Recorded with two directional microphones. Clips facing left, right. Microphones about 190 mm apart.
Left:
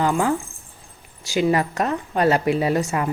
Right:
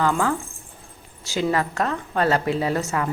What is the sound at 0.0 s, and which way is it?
Speech, 15° left (ahead or behind).